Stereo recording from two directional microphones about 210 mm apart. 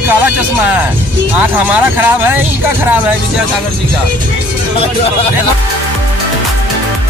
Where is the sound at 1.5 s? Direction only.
10° right (ahead or behind).